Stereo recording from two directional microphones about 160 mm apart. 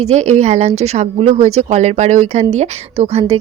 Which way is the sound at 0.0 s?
45° right (ahead or behind).